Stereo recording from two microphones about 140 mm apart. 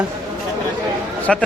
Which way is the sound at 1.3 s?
Centre (ahead or behind).